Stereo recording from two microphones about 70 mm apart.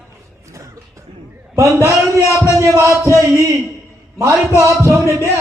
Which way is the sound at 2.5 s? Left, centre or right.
Right.